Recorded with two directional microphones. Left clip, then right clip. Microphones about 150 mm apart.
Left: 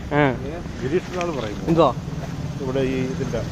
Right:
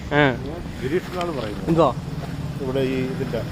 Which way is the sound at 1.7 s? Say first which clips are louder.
Left 1 dB; 5° left (ahead or behind).